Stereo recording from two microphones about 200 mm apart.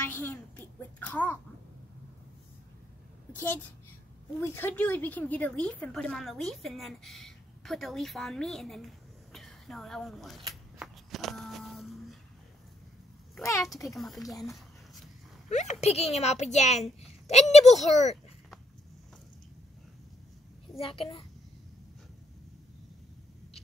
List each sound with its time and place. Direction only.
0.1 s a child's voice: 10° left (ahead or behind)
3.3 s a child's voice: 10° left (ahead or behind)
10.5 s a sound: centre (ahead or behind)
13.4 s a child's voice: 15° left (ahead or behind)
13.9 s a woman's voice: centre (ahead or behind)
15.5 s a child's voice: 35° left (ahead or behind)
20.7 s a child's voice: 30° left (ahead or behind)